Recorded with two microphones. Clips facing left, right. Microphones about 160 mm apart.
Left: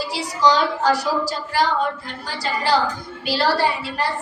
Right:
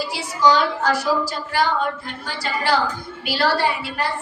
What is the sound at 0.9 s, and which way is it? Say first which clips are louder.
A woman's voice: left 1 dB; 35° left (ahead or behind).